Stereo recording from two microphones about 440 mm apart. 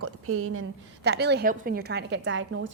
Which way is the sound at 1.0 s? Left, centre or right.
Right.